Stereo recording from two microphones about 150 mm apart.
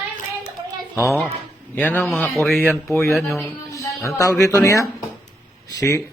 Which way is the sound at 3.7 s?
20° left (ahead or behind).